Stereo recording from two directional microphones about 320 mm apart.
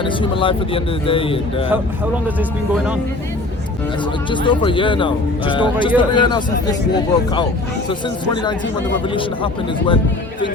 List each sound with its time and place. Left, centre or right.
0.0 s speech: centre
2.7 s speech: centre
4.3 s speech: centre
7.9 s speech: centre